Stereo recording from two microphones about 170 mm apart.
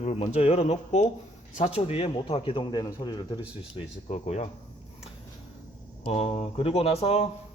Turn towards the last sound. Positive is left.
turn(degrees=35)  # may be behind; listen again after turning